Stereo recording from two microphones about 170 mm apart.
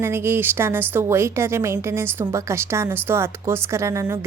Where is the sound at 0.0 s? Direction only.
15° right (ahead or behind).